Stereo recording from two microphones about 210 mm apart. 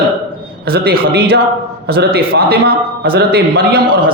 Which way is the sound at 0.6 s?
45° right (ahead or behind).